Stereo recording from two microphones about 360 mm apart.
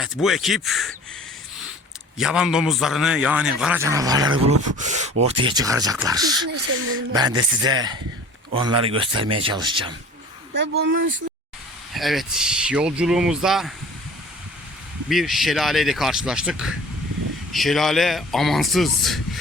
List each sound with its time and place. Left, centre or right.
0.0 s a man's voice: centre
2.1 s a man's voice: centre
10.5 s speech: right
11.9 s a man's voice: centre
15.1 s a man's voice: centre